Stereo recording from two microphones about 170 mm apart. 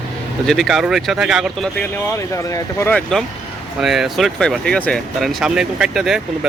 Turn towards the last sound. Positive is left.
turn(degrees=-5)  # may be behind; listen again after turning